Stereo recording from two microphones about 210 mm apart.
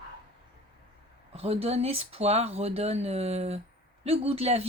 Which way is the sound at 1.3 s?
30° right (ahead or behind).